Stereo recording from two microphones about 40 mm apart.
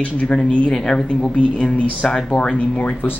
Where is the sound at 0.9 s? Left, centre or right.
Centre.